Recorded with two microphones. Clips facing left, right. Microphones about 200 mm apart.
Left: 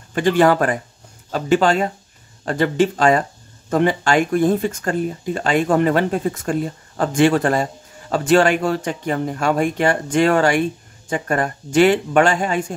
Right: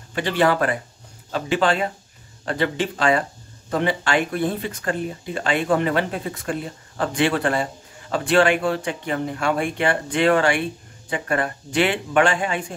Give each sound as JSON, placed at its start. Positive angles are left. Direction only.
{"t": 0.1, "sound": "speech", "side_deg": 45}